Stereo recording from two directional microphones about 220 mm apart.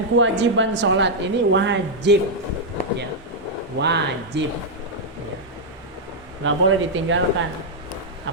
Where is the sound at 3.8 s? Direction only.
50° right (ahead or behind).